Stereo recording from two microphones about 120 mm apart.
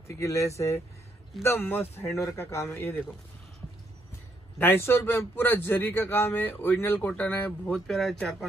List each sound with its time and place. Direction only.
0.2 s a man's voice: 25° left (ahead or behind)
4.6 s a man's voice: 20° left (ahead or behind); by 8.5 s centre (ahead or behind)